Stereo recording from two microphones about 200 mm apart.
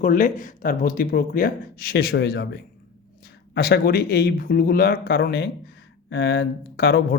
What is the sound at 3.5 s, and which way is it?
Speech, 55° left (ahead or behind).